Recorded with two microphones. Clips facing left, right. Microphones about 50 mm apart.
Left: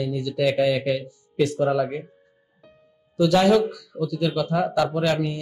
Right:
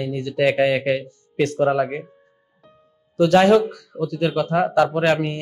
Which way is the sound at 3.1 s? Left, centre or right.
Right.